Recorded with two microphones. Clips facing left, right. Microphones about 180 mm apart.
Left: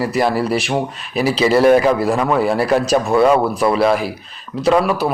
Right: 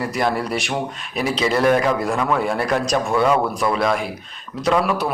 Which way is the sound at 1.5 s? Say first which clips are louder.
Left 6 dB; 30° left (ahead or behind).